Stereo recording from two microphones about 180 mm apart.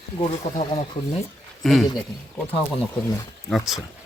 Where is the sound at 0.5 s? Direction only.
35° left (ahead or behind).